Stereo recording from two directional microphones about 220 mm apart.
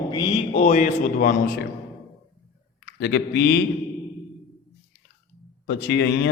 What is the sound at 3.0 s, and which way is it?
Speech, 50° left (ahead or behind).